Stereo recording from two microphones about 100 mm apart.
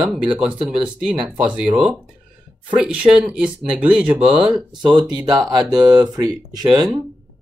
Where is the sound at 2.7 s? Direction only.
10° right (ahead or behind).